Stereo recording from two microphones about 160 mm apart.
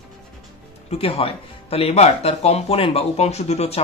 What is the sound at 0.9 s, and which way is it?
Speech, 35° left (ahead or behind).